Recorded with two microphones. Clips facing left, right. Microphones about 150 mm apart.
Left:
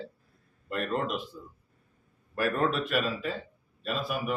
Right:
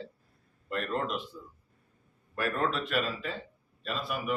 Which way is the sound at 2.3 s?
5° left (ahead or behind).